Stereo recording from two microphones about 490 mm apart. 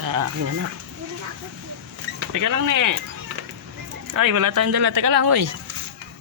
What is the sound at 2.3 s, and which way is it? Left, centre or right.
Speech, right.